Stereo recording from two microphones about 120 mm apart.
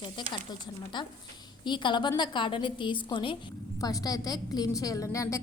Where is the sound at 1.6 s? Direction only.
40° left (ahead or behind).